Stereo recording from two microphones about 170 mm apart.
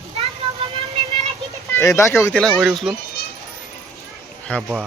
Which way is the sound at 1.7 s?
15° left (ahead or behind).